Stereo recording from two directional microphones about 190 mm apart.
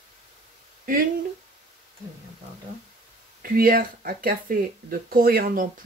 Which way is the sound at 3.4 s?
50° right (ahead or behind).